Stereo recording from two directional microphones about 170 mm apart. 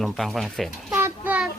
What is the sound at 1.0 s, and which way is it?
Child singing, 10° right (ahead or behind).